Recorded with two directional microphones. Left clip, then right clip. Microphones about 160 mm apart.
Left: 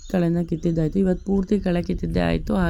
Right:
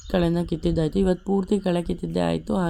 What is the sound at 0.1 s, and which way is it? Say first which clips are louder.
Speech: even; 15° left (ahead or behind).